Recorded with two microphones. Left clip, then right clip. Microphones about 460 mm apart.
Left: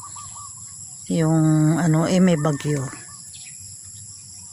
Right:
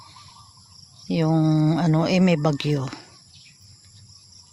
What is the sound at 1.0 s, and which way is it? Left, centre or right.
Speech, right.